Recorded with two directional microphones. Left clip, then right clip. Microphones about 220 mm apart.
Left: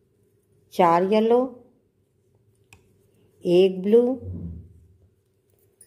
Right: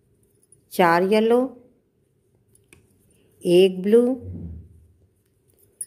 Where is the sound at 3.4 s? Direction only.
15° right (ahead or behind).